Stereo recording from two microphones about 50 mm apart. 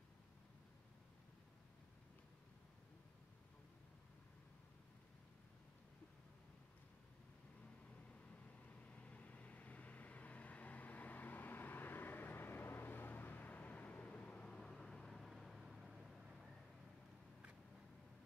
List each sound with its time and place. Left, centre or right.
8.7 s vehicle: left; by 16.4 s centre